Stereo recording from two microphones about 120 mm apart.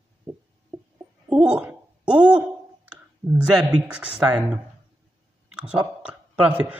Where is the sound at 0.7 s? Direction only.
Centre (ahead or behind).